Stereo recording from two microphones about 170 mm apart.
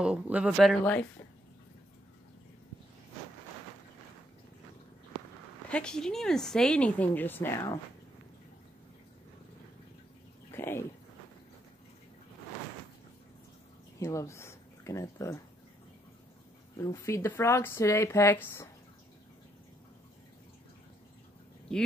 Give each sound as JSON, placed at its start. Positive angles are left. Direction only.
{"t": 0.0, "sound": "speech", "side_deg": -5}
{"t": 5.7, "sound": "speech", "side_deg": 5}
{"t": 10.5, "sound": "speech", "side_deg": 15}
{"t": 13.9, "sound": "speech", "side_deg": 15}
{"t": 16.7, "sound": "speech", "side_deg": 15}